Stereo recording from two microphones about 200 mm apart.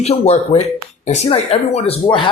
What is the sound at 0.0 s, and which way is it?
Speech, 30° left (ahead or behind).